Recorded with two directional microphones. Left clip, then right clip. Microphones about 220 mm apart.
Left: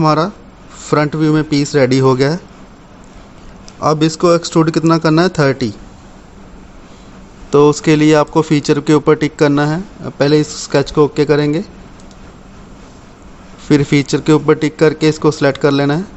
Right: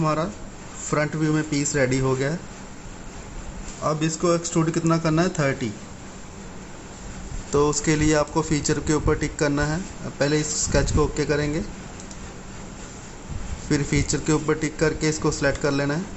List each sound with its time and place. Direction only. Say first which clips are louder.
0.0 s speech: left 11 dB; 50° left (ahead or behind)
3.8 s speech: left 11 dB; 50° left (ahead or behind)
7.5 s a man's voice: left 11 dB; 40° left (ahead or behind)
13.7 s a man's voice: left 12 dB; 40° left (ahead or behind)